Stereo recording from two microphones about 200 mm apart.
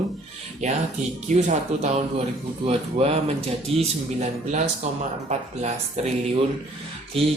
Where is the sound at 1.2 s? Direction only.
35° right (ahead or behind).